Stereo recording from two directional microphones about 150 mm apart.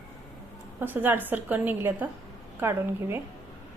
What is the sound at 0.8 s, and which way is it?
A woman's voice, 15° right (ahead or behind).